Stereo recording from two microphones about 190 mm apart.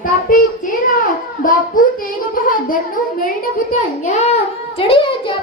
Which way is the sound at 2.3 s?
45° left (ahead or behind).